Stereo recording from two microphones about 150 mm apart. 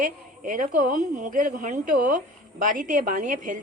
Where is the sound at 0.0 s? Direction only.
60° right (ahead or behind).